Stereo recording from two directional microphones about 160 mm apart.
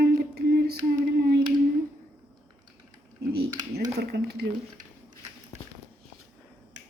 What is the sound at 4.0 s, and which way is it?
Speech, 90° right.